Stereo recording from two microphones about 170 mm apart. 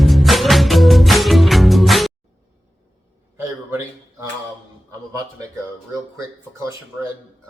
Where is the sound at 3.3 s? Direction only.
15° right (ahead or behind).